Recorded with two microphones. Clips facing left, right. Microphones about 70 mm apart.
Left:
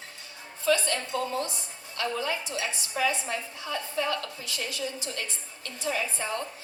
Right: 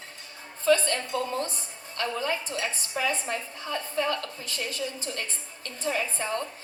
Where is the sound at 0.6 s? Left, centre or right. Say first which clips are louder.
Right 3 dB; right.